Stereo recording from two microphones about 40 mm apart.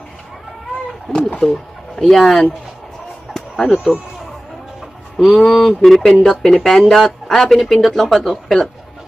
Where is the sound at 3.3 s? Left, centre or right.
Centre.